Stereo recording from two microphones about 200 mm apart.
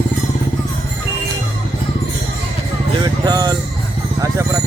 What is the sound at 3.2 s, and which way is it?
Music, 20° right (ahead or behind).